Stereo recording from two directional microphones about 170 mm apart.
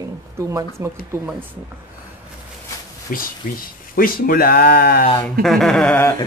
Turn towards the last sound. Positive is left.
turn(degrees=10)  # may be behind; listen again after turning